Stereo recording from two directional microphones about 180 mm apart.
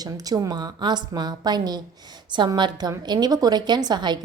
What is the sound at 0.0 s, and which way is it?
A woman's voice, 20° right (ahead or behind).